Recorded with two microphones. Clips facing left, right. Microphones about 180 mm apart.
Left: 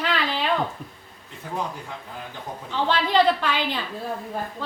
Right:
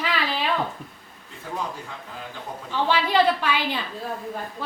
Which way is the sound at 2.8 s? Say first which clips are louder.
Left 1 dB; 10° right (ahead or behind).